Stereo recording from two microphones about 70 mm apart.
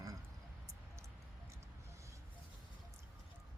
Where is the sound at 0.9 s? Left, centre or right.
Right.